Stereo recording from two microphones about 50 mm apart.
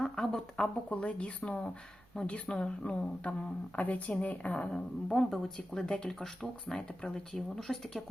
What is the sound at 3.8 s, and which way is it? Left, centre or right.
Speech, left.